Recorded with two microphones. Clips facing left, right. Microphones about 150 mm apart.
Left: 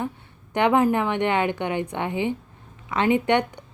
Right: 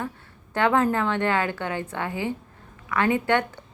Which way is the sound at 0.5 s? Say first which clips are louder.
Left 2 dB; 15° left (ahead or behind).